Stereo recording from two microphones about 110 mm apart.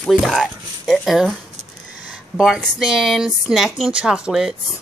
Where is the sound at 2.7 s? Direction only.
5° right (ahead or behind).